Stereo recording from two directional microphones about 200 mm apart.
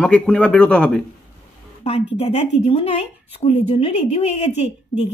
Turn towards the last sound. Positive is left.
turn(degrees=35)  # may be behind; listen again after turning